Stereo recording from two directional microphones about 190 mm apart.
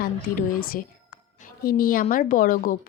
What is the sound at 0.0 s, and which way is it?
Speech, 50° left (ahead or behind).